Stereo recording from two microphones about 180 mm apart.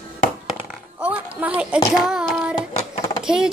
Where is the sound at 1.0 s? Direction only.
5° right (ahead or behind).